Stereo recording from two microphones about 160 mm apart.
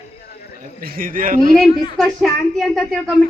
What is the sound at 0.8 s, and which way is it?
Speech, 65° right (ahead or behind).